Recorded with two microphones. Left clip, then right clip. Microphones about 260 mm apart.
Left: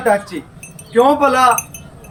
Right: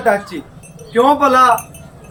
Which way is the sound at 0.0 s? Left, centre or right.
Centre.